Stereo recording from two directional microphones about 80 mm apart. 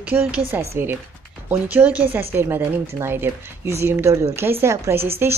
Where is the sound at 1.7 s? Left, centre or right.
Centre.